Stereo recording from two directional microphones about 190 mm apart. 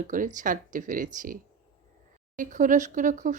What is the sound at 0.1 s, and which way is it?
Speech, 45° right (ahead or behind).